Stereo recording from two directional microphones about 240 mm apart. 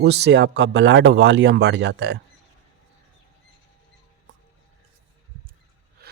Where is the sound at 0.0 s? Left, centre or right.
Right.